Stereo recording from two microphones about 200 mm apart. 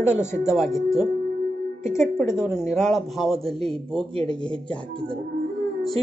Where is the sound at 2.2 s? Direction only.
5° right (ahead or behind).